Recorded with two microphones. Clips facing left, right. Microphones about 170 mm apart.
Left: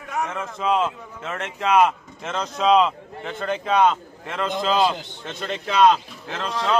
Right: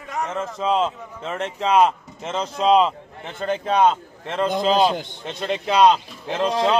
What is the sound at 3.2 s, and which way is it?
A man's voice, 35° right (ahead or behind).